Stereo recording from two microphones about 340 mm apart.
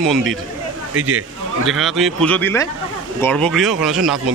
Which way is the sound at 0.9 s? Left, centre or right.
Right.